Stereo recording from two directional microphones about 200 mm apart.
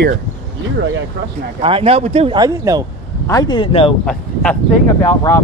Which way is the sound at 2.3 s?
20° right (ahead or behind).